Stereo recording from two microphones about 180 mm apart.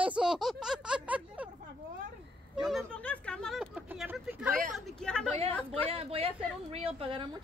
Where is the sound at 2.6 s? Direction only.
Centre (ahead or behind).